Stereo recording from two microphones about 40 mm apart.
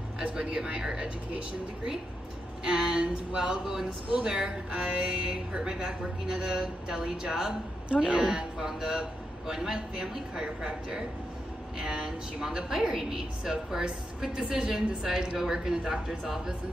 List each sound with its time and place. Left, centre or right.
0.2 s a sound: right
0.6 s speech: centre
2.6 s speech: centre
4.1 s speech: right
7.9 s speech: right
8.4 s speech: centre